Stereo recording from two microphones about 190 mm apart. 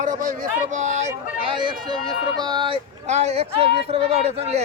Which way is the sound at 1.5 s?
25° right (ahead or behind).